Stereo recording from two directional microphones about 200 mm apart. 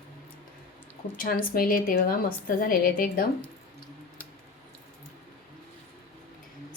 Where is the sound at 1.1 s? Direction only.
45° left (ahead or behind).